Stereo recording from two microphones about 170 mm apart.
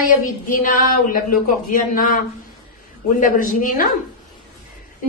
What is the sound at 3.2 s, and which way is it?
Speech, 55° left (ahead or behind).